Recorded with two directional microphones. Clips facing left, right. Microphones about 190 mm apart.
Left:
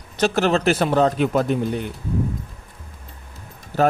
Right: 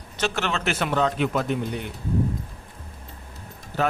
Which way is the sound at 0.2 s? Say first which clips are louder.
Left 8 dB; 40° left (ahead or behind).